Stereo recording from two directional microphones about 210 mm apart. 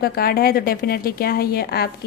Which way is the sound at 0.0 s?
45° left (ahead or behind).